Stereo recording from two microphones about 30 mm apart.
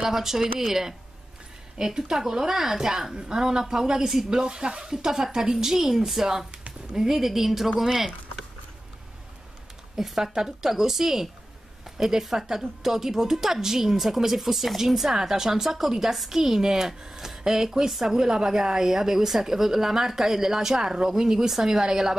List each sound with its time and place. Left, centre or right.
0.0 s a woman's voice: centre
1.8 s a woman's voice: centre
9.9 s a woman's voice: centre